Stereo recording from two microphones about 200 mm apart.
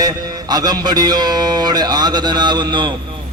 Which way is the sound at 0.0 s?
20° right (ahead or behind).